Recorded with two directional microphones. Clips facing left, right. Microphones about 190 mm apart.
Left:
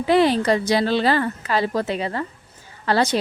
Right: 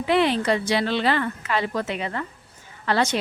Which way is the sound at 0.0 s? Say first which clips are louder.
Left 4 dB; 35° left (ahead or behind).